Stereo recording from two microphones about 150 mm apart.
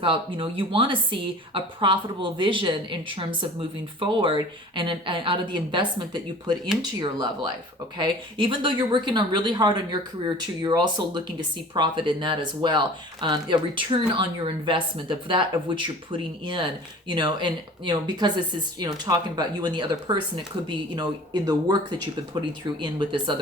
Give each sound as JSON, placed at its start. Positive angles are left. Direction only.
{"t": 0.0, "sound": "speech", "side_deg": -35}